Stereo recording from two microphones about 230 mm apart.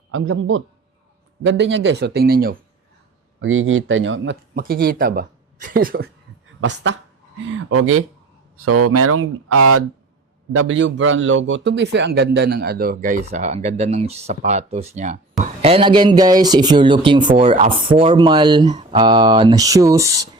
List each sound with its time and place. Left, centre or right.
0.1 s a man's voice: right
3.4 s speech: right
6.6 s a man's voice: right
8.6 s speech: right
10.5 s a man's voice: right; by 20.2 s centre